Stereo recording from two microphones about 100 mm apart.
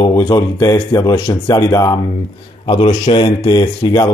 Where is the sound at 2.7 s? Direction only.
75° left (ahead or behind); by 3.6 s 60° left (ahead or behind).